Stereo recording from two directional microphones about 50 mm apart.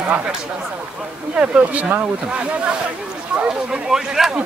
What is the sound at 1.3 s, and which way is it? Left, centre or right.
Speech, right.